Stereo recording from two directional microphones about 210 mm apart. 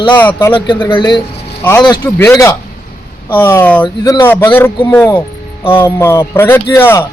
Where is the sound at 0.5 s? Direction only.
20° left (ahead or behind).